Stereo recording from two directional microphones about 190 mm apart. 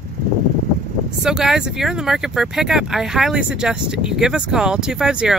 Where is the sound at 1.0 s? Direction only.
5° right (ahead or behind).